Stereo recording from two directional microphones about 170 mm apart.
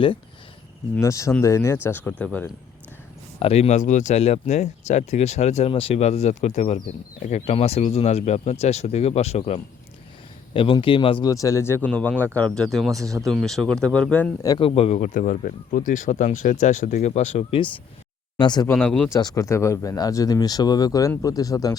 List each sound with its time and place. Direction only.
0.9 s speech: 15° left (ahead or behind)
3.4 s speech: 40° left (ahead or behind); by 13.0 s centre (ahead or behind)
13.0 s speech: 20° right (ahead or behind)
13.2 s speech: centre (ahead or behind)
14.6 s speech: 35° left (ahead or behind)
18.3 s speech: 25° left (ahead or behind)
18.7 s speech: 5° left (ahead or behind)
19.1 s speech: 20° left (ahead or behind)